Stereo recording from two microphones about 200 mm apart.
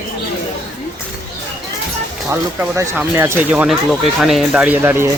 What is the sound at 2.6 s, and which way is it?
Speech, 10° right (ahead or behind).